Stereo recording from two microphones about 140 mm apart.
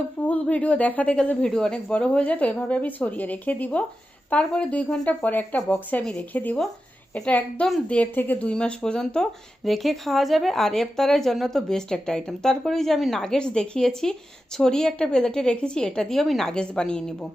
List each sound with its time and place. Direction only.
0.2 s a woman's voice: 10° left (ahead or behind)